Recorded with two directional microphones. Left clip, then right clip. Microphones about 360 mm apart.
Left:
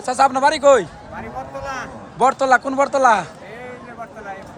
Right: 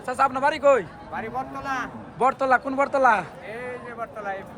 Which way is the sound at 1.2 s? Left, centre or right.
Centre.